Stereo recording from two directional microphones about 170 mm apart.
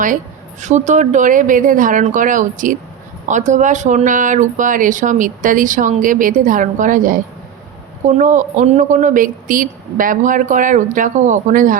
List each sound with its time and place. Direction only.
0.6 s speech: 45° right (ahead or behind)